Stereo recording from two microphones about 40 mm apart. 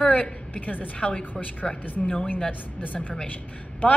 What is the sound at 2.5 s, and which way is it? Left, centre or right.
Speech, left.